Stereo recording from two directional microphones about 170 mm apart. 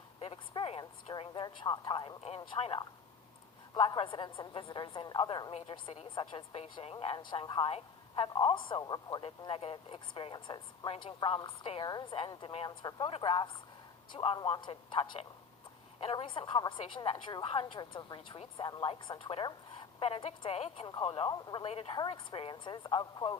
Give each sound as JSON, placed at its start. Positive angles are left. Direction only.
{"t": 0.2, "sound": "a woman's voice", "side_deg": 35}